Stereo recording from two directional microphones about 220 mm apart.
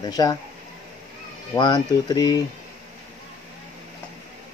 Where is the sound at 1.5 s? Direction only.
20° left (ahead or behind).